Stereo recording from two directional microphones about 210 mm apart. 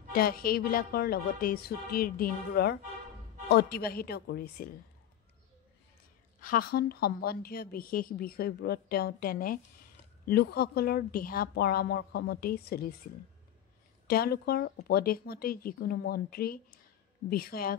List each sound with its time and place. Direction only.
0.1 s a woman's voice: 45° left (ahead or behind)
6.4 s a woman's voice: 45° left (ahead or behind)
14.0 s a woman's voice: 45° left (ahead or behind)